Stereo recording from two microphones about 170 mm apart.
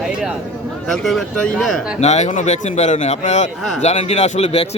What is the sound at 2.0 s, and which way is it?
A man's voice, 40° left (ahead or behind).